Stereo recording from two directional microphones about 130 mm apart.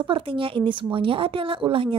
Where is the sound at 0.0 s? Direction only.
40° right (ahead or behind).